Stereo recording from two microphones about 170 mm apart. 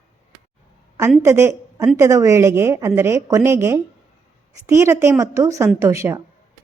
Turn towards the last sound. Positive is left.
turn(degrees=-15)  # may be behind; listen again after turning